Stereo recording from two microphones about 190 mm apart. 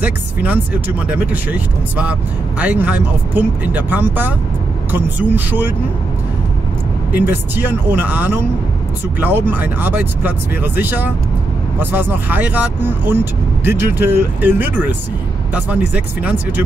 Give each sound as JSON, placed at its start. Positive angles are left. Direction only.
{"t": 0.0, "sound": "speech", "side_deg": -10}
{"t": 7.1, "sound": "speech", "side_deg": -10}